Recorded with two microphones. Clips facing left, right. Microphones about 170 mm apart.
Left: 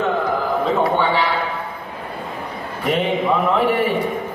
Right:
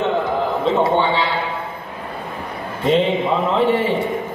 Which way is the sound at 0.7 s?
25° right (ahead or behind).